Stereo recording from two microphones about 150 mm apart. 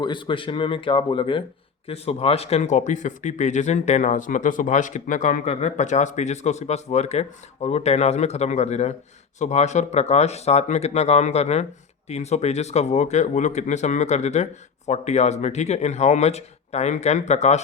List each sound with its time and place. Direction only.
0.0 s speech: 30° left (ahead or behind); by 17.6 s 50° left (ahead or behind)